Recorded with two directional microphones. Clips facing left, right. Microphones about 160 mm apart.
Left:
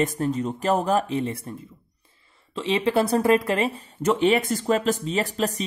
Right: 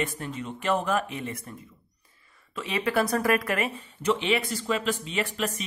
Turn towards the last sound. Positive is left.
turn(degrees=35)  # may be behind; listen again after turning